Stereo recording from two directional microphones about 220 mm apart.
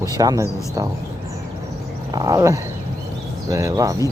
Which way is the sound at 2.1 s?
15° right (ahead or behind).